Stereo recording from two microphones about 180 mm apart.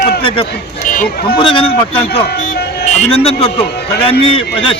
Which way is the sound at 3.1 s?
35° left (ahead or behind).